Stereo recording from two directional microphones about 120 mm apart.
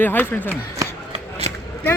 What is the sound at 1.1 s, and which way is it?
Shuffling cards, 55° right (ahead or behind).